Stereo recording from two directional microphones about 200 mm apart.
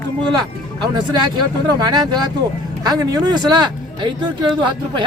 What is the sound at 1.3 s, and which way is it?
Speech, 20° right (ahead or behind).